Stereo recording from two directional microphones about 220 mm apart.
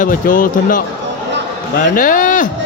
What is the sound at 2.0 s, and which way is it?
Speech, 40° left (ahead or behind).